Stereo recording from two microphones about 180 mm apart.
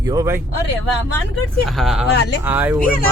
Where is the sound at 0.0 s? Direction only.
20° right (ahead or behind).